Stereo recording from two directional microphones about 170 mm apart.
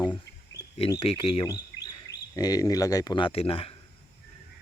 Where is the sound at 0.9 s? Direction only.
35° left (ahead or behind).